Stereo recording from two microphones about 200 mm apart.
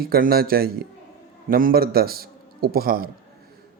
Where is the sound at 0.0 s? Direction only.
50° right (ahead or behind).